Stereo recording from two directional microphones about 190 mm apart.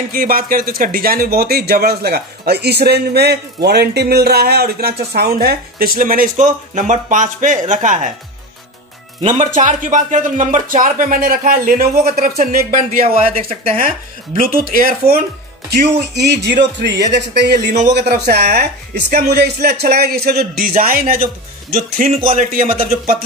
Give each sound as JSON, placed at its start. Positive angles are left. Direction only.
{"t": 0.1, "sound": "speech", "side_deg": -50}
{"t": 9.2, "sound": "speech", "side_deg": -35}
{"t": 13.0, "sound": "speech", "side_deg": -30}
{"t": 13.7, "sound": "speech", "side_deg": -45}